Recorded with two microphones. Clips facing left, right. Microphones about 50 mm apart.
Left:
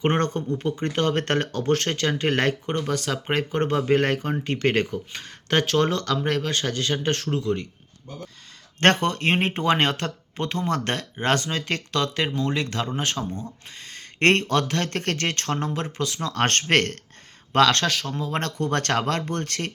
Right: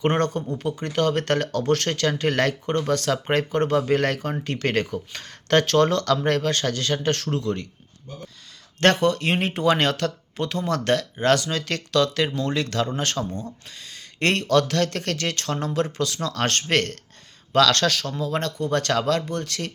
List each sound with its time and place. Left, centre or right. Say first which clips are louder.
0.0 s speech: right 1 dB; left
2.6 s speech: right 3 dB; centre
3.5 s speech: left 1 dB; left
6.2 s speech: right 3 dB; centre
6.5 s speech: right 1 dB; centre
8.8 s speech: right 1 dB; left; by 13.5 s centre
13.8 s speech: left 4 dB; left
15.5 s speech: right 3 dB; left
16.3 s speech: left 4 dB; left
17.5 s speech: even; left
18.5 s speech: even; left